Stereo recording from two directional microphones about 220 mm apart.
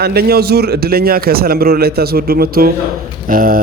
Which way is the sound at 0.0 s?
45° right (ahead or behind).